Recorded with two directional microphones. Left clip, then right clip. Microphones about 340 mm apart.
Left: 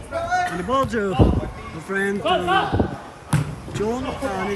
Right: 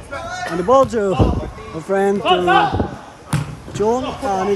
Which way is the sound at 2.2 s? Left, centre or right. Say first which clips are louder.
Right 5 dB; centre.